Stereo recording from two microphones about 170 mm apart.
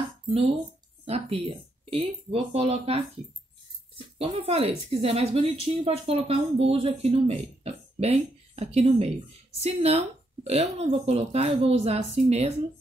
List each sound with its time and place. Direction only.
1.0 s speech: 35° right (ahead or behind)
4.2 s speech: 35° right (ahead or behind)